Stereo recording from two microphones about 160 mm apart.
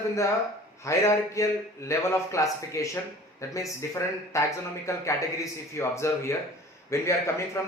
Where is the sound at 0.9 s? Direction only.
20° left (ahead or behind).